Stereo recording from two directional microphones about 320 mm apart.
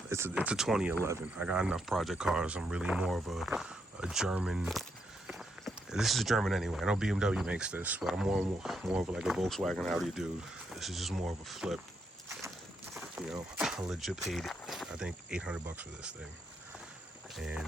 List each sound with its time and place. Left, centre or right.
0.1 s speech: centre
12.9 s speech: centre
17.3 s speech: centre